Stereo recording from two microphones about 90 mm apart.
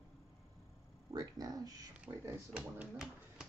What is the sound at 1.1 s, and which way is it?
Speech, 45° right (ahead or behind).